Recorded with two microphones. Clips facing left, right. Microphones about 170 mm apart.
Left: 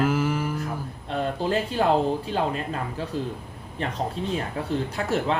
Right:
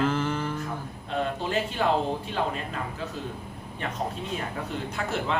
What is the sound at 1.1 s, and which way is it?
Speech, 35° left (ahead or behind).